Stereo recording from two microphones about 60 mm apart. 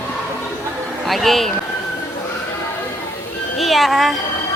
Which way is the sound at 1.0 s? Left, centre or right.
Centre.